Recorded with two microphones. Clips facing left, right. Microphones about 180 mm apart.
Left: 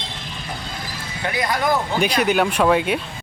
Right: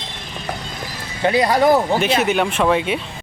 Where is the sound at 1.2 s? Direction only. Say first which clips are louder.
Right 7 dB; 30° right (ahead or behind).